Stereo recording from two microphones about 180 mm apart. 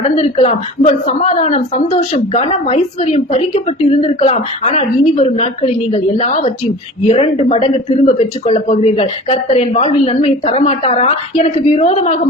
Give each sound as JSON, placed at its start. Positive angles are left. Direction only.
{"t": 0.2, "sound": "a woman's voice", "side_deg": 35}